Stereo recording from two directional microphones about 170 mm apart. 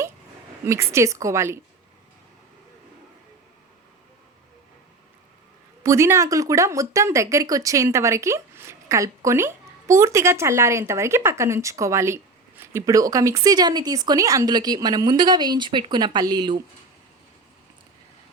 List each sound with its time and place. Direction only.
0.6 s a woman's voice: 15° right (ahead or behind)
5.8 s a woman's voice: 15° right (ahead or behind)